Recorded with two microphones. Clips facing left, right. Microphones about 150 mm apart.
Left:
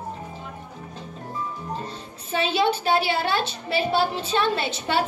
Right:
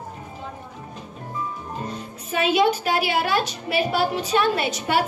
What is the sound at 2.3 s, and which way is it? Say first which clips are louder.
A woman's voice: right 3 dB; 30° left (ahead or behind).